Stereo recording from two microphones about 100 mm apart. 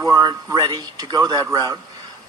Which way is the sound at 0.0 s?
40° right (ahead or behind).